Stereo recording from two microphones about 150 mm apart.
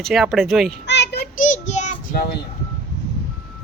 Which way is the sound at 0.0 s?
Centre (ahead or behind).